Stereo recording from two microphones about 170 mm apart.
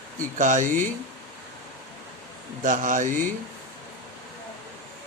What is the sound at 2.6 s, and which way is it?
Speech, 50° right (ahead or behind).